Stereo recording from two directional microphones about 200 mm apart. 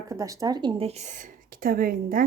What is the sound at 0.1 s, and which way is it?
A woman's voice, 15° right (ahead or behind).